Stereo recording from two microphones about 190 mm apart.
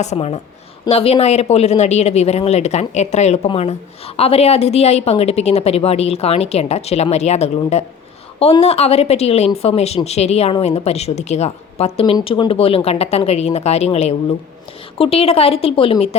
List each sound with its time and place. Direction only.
0.0 s speech: 35° left (ahead or behind)